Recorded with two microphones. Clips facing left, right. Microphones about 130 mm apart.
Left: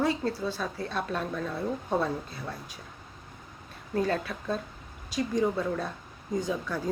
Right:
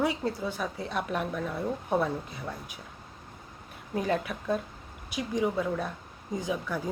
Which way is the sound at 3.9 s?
15° right (ahead or behind).